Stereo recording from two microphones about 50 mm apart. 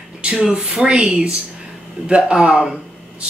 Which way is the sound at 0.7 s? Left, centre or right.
Centre.